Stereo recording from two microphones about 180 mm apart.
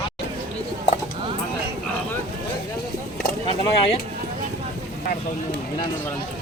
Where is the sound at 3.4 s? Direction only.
30° left (ahead or behind).